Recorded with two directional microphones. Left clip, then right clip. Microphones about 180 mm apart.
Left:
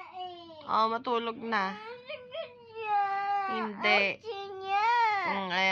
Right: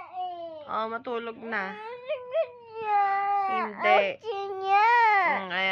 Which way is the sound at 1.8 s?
45° right (ahead or behind).